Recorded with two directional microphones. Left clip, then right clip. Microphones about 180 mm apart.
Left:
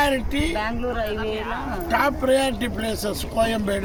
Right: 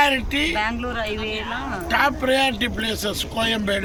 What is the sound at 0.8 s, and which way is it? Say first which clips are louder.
Speech: left 1 dB; 25° left (ahead or behind).